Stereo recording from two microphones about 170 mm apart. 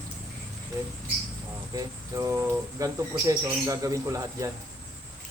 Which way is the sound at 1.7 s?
15° right (ahead or behind).